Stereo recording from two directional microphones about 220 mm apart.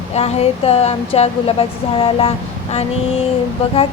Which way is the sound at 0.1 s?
30° left (ahead or behind).